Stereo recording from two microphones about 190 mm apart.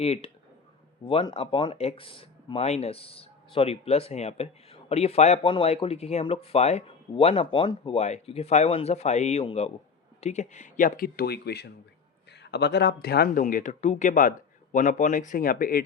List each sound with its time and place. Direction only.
0.0 s speech: 30° left (ahead or behind); by 15.8 s 50° left (ahead or behind)